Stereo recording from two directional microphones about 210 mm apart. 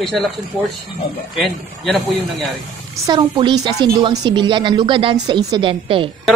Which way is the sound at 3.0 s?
20° right (ahead or behind).